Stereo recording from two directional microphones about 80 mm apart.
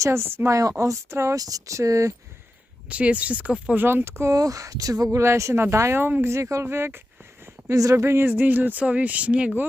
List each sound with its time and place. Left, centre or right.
0.0 s speech: right
0.5 s speech: right
2.9 s speech: centre
3.8 s speech: right
4.4 s speech: right
6.3 s speech: right
7.4 s speech: right; by 9.6 s centre